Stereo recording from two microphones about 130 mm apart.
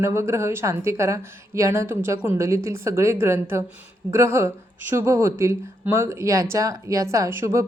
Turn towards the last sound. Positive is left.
turn(degrees=-25)  # may be behind; listen again after turning